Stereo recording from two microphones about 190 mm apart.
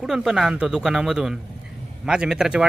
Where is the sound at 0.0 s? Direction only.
5° right (ahead or behind).